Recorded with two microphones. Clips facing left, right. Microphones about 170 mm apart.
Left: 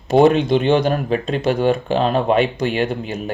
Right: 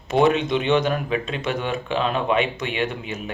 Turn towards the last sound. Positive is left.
turn(degrees=35)  # may be behind; listen again after turning